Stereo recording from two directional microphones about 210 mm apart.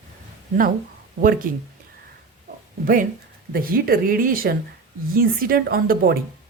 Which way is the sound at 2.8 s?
40° right (ahead or behind).